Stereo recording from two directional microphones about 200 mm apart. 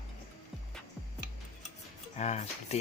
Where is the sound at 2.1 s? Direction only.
35° left (ahead or behind).